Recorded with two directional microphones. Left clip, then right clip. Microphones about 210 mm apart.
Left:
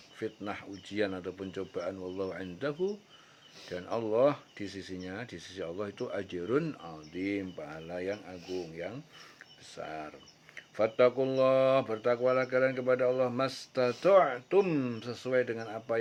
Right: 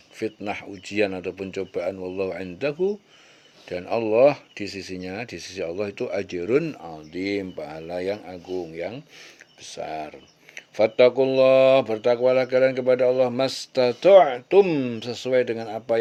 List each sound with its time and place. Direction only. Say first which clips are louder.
0.2 s speech: right 9 dB; 35° right (ahead or behind)